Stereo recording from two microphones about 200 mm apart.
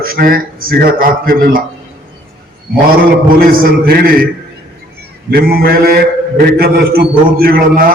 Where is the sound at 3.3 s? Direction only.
45° right (ahead or behind).